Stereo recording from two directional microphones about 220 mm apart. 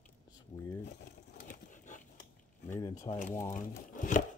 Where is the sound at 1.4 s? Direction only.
35° left (ahead or behind).